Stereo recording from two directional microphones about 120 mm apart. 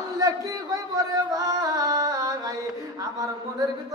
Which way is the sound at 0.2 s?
30° right (ahead or behind).